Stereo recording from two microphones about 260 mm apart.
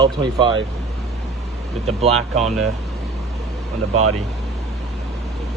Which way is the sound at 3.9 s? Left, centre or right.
Right.